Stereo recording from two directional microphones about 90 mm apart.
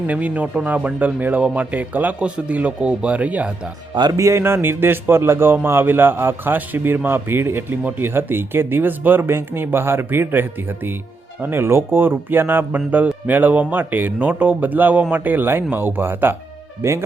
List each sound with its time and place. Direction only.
0.1 s speech: 15° right (ahead or behind)
4.2 s speech: 30° right (ahead or behind)